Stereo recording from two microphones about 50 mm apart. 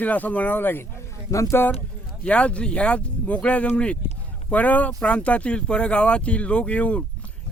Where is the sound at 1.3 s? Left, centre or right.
Left.